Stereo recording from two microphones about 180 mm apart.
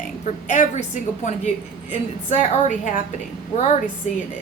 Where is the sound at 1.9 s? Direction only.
40° left (ahead or behind).